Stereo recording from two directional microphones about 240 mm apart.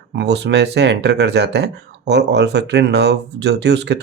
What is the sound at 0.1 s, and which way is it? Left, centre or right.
Speech, right.